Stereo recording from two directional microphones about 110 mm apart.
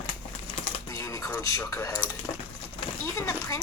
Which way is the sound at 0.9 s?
30° left (ahead or behind).